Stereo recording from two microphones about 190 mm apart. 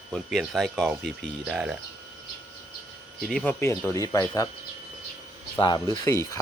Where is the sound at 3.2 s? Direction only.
5° left (ahead or behind).